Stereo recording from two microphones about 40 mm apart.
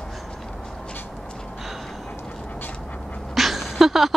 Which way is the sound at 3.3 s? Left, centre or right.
Centre.